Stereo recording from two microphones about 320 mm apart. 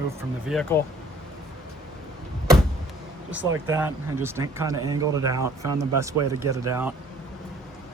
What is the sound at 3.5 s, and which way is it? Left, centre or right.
Speech, centre.